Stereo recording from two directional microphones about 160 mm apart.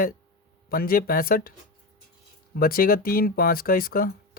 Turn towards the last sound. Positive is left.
turn(degrees=65)  # may be behind; listen again after turning